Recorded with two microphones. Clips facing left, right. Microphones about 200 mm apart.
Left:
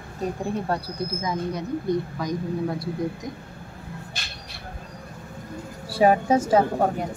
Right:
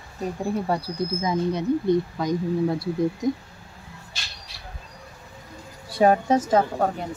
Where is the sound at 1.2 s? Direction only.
25° right (ahead or behind).